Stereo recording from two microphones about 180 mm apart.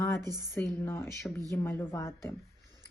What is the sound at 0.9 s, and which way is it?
Speech, 15° left (ahead or behind).